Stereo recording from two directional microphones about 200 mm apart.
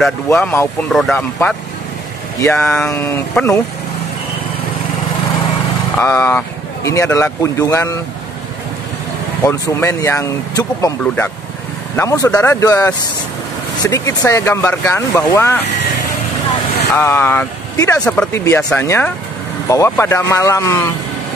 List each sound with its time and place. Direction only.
0.3 s speech: 10° left (ahead or behind)
5.9 s speech: 10° left (ahead or behind)
9.4 s speech: 15° left (ahead or behind)
12.0 s speech: 15° left (ahead or behind)
16.9 s speech: 10° left (ahead or behind)